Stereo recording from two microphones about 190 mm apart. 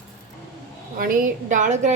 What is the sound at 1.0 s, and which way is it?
Speech, 45° right (ahead or behind).